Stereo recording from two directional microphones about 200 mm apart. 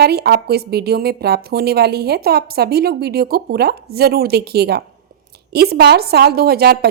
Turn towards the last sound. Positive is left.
turn(degrees=-50)  # may be behind; listen again after turning